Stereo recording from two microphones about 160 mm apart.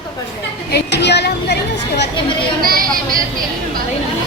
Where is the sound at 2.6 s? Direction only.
65° right (ahead or behind).